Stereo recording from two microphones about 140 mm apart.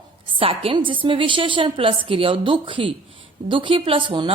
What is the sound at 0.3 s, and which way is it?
Speech, 40° right (ahead or behind).